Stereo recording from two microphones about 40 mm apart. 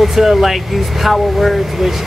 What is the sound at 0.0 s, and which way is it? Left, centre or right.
Speech, centre.